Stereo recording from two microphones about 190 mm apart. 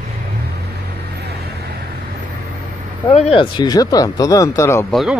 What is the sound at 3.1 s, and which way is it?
Speech, 30° left (ahead or behind).